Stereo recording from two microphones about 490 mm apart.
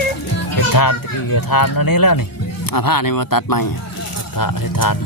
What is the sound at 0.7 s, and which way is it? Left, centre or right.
A child's voice, left.